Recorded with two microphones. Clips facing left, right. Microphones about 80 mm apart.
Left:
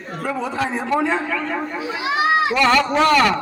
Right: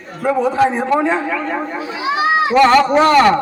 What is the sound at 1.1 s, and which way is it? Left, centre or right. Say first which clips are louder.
Speech: right 3 dB; centre.